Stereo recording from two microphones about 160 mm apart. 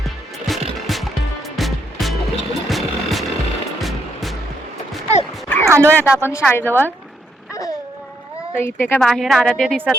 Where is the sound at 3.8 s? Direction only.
Centre (ahead or behind).